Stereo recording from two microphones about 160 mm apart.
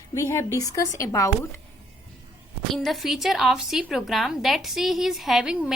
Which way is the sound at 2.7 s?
Centre (ahead or behind).